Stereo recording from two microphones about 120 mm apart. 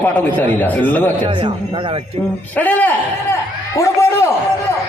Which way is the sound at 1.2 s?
40° right (ahead or behind).